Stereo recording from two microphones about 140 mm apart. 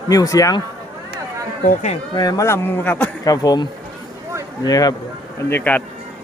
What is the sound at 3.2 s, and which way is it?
Speech, 25° left (ahead or behind).